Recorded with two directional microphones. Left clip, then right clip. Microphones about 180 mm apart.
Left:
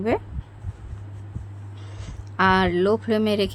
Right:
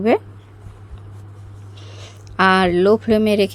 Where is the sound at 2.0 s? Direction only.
25° right (ahead or behind).